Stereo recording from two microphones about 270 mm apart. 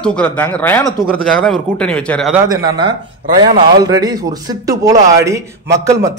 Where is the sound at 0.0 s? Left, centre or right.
Centre.